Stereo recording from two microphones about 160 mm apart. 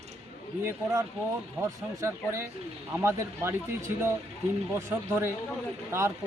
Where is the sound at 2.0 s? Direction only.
15° right (ahead or behind).